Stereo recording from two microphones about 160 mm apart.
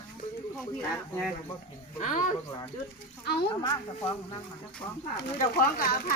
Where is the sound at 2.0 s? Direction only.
50° left (ahead or behind).